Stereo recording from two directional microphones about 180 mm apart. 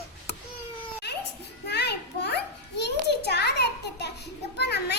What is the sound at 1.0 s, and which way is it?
Children playing, 70° left (ahead or behind).